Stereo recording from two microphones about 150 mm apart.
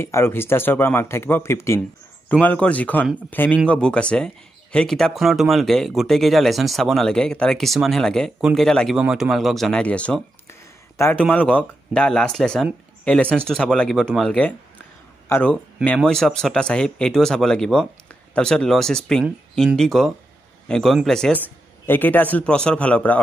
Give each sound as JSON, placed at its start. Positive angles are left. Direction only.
{"t": 0.0, "sound": "a man's voice", "side_deg": 15}